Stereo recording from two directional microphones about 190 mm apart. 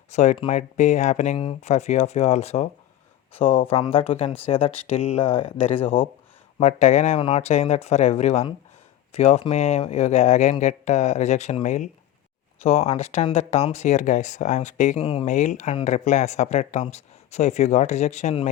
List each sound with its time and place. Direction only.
0.1 s speech: 35° left (ahead or behind)